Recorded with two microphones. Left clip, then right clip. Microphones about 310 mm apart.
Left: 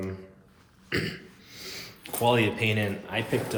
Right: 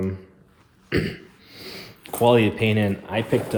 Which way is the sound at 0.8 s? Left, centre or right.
Right.